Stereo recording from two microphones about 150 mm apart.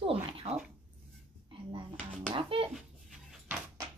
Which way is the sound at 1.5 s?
35° right (ahead or behind).